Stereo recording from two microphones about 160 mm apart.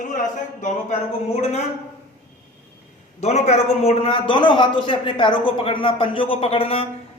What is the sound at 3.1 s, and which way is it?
A man's voice, 45° left (ahead or behind).